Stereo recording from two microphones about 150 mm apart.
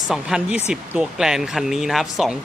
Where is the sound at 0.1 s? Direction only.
5° right (ahead or behind).